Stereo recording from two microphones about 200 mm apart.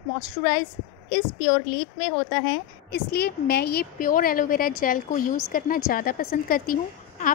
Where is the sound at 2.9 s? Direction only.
55° left (ahead or behind).